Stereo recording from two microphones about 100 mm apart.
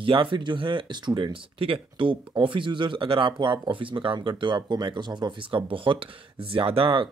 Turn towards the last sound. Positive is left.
turn(degrees=-65)  # may be behind; listen again after turning